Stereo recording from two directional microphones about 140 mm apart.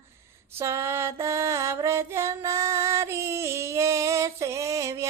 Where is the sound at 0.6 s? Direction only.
20° right (ahead or behind).